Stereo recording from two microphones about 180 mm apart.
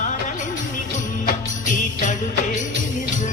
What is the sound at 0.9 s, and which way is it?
Jingle bell, 45° left (ahead or behind).